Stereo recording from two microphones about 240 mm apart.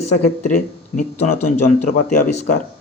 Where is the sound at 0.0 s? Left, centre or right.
Left.